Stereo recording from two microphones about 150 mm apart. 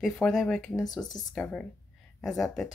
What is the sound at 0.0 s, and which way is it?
A woman's voice, centre (ahead or behind).